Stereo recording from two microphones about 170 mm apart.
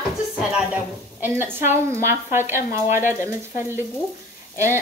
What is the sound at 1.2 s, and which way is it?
Speech, 15° right (ahead or behind).